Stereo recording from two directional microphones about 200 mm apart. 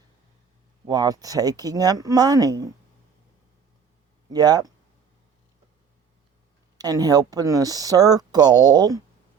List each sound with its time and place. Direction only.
0.9 s speech: 20° right (ahead or behind)
4.3 s speech: 20° right (ahead or behind)
6.7 s speech: 20° right (ahead or behind)